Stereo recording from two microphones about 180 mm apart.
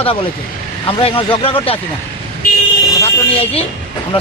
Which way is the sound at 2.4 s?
55° left (ahead or behind).